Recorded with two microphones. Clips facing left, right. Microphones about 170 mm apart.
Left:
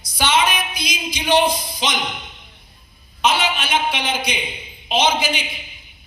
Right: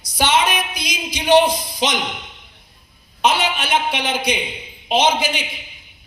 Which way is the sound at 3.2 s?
55° right (ahead or behind).